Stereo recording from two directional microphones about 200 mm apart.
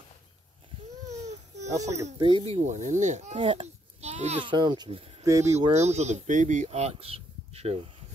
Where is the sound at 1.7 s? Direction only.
15° right (ahead or behind).